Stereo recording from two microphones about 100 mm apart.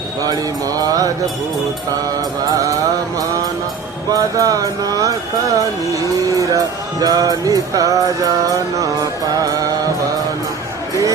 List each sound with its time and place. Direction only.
0.2 s music: 40° right (ahead or behind)
4.1 s music: 35° right (ahead or behind)